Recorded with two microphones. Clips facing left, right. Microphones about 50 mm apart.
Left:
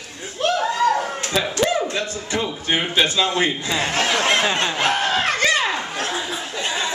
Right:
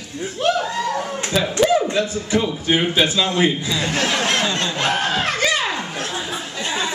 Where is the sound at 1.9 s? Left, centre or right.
Centre.